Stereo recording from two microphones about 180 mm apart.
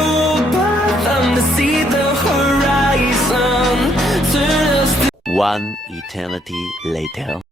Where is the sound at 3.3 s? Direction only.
Centre (ahead or behind).